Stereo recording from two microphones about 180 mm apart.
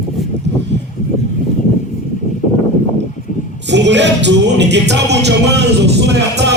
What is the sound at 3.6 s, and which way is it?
Music, 80° right.